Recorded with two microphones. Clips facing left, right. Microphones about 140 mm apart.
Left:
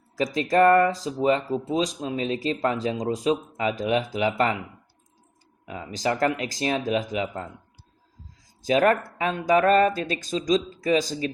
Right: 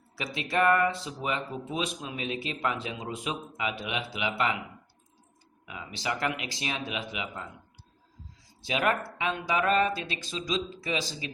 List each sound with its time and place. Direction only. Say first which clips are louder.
0.2 s speech: left 8 dB; 40° left (ahead or behind)
5.6 s speech: left 7 dB; 40° left (ahead or behind)
8.6 s speech: left 8 dB; 40° left (ahead or behind)